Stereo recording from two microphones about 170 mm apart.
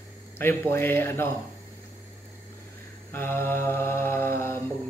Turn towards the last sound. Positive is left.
turn(degrees=15)  # may be behind; listen again after turning